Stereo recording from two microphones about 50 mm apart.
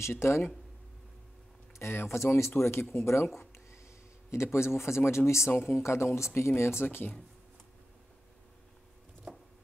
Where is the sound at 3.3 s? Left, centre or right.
Left.